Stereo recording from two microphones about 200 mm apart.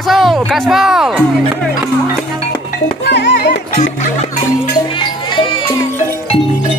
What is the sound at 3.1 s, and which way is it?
Music, 60° left (ahead or behind).